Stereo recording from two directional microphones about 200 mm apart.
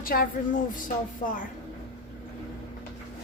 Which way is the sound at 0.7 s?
40° left (ahead or behind).